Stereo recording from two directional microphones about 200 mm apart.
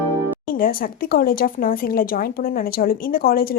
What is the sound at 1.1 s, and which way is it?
A woman's voice, 45° left (ahead or behind).